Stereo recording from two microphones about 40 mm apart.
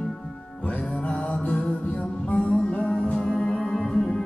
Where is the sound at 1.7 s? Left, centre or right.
Left.